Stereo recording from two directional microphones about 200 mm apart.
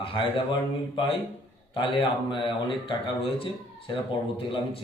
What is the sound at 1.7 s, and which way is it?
Speech, 25° left (ahead or behind).